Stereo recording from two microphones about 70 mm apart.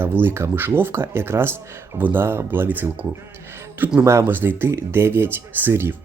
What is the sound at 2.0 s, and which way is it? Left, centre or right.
Speech, right.